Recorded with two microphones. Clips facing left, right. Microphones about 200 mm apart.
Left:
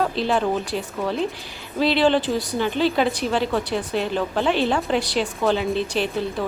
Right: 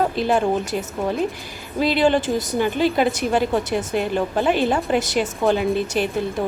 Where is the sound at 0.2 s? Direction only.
50° right (ahead or behind).